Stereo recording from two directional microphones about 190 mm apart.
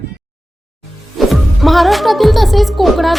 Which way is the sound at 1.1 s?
Centre (ahead or behind).